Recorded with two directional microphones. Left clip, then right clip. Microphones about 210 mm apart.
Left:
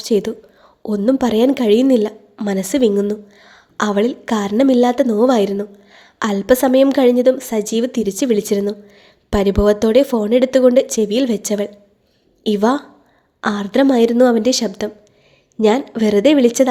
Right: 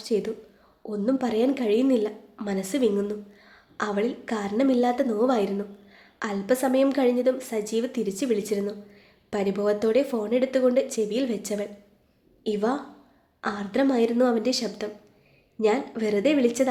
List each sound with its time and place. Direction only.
0.0 s a woman's voice: 40° left (ahead or behind)